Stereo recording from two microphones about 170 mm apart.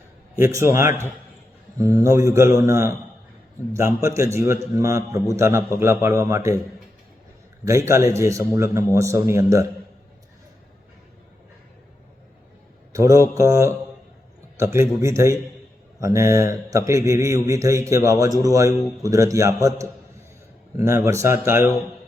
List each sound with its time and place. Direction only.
0.3 s a man's voice: 15° right (ahead or behind)
7.7 s a man's voice: 15° right (ahead or behind)
12.9 s a man's voice: 20° right (ahead or behind)